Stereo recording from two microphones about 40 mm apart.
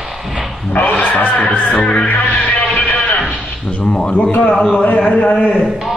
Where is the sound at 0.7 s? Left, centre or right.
Left.